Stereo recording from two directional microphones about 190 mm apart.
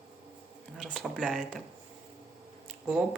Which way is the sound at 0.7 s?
5° left (ahead or behind).